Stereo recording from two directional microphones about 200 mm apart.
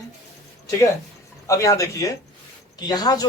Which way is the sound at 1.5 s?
15° left (ahead or behind).